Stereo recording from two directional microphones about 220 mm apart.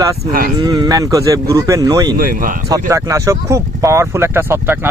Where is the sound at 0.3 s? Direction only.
40° right (ahead or behind).